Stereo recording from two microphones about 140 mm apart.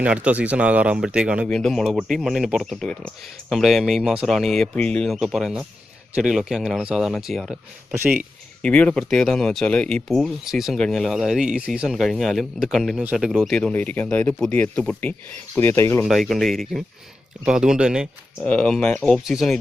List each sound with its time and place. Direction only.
0.0 s speech: 10° right (ahead or behind)
1.5 s speech: 5° left (ahead or behind)
7.9 s speech: 15° right (ahead or behind)
8.6 s speech: 10° left (ahead or behind)
16.0 s speech: centre (ahead or behind)
18.4 s speech: 5° left (ahead or behind)